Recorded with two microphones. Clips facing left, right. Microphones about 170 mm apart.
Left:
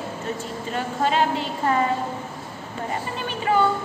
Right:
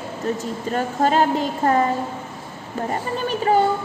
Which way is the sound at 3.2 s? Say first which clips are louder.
Right 4 dB; 40° right (ahead or behind).